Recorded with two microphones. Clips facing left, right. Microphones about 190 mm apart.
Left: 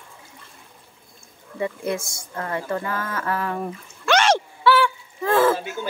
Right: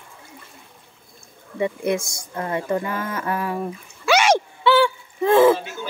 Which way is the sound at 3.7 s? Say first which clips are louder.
Right 2 dB; 10° right (ahead or behind).